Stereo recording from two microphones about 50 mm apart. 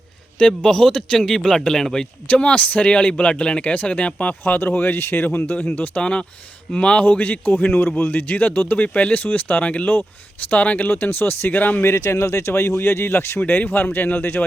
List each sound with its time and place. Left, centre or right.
0.6 s a man's voice: centre
2.3 s a man's voice: left
6.0 s a man's voice: centre
7.0 s a man's voice: left
10.8 s speech: left
11.9 s speech: left
13.6 s a man's voice: left